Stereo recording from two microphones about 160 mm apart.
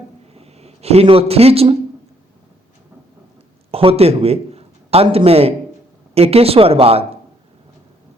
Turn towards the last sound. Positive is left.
turn(degrees=-35)  # may be behind; listen again after turning